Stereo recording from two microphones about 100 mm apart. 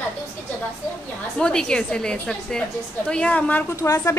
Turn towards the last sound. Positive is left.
turn(degrees=35)  # may be behind; listen again after turning